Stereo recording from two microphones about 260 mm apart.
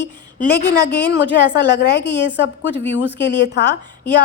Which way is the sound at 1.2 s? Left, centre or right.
Left.